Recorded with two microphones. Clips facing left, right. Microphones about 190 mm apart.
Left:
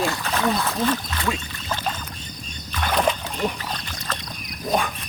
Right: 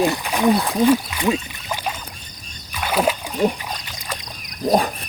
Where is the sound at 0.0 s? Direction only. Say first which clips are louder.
Right 5 dB; 15° right (ahead or behind).